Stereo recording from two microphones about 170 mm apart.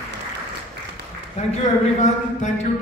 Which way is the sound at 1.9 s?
45° left (ahead or behind).